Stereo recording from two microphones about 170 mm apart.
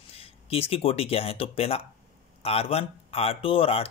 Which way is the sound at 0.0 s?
35° left (ahead or behind).